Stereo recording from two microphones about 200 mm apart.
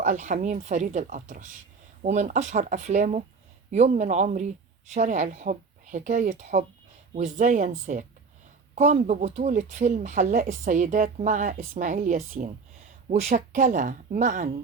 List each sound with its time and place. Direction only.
0.0 s speech: 40° right (ahead or behind)